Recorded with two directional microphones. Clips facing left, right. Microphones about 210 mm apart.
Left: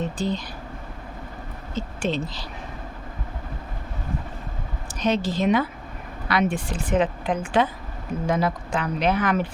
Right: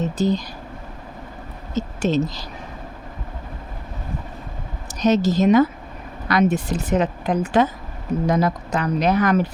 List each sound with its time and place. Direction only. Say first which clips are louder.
0.0 s speech: right 5 dB; 40° right (ahead or behind)
1.7 s speech: right 6 dB; 40° right (ahead or behind)
4.9 s speech: right 6 dB; 40° right (ahead or behind)